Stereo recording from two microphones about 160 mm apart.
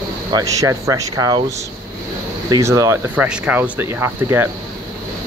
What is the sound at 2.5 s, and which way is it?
Speech, 20° right (ahead or behind).